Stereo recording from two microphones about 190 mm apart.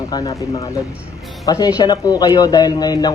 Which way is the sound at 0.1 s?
20° left (ahead or behind).